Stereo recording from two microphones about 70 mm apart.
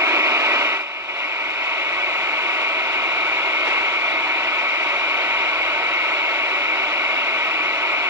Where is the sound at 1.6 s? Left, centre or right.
Right.